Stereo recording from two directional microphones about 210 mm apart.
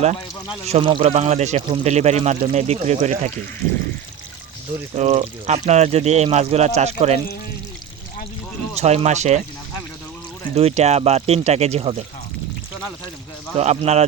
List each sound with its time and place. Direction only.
0.7 s speech: 25° right (ahead or behind)
4.9 s speech: 30° right (ahead or behind)
8.7 s speech: 30° right (ahead or behind)
10.5 s speech: 30° right (ahead or behind)
13.6 s speech: 30° right (ahead or behind)